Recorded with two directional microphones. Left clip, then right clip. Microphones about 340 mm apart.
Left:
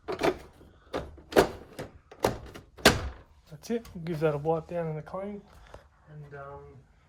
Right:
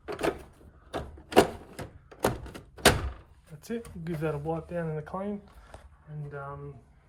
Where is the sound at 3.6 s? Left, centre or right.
Centre.